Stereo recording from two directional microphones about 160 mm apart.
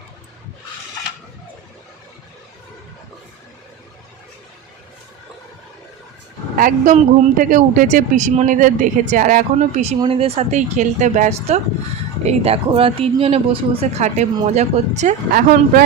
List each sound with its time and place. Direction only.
6.6 s speech: 55° right (ahead or behind)
10.0 s a woman's voice: 35° right (ahead or behind)
15.3 s speech: 65° right (ahead or behind)